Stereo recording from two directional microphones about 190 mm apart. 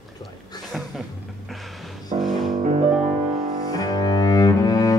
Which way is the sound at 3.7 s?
20° left (ahead or behind).